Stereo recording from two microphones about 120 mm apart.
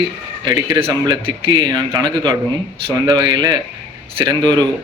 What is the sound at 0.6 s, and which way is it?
Speech, 40° right (ahead or behind).